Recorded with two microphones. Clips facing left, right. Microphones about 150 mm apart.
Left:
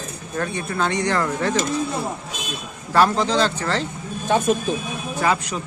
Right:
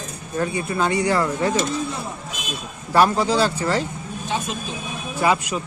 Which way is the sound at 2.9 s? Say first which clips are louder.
Even; 10° right (ahead or behind).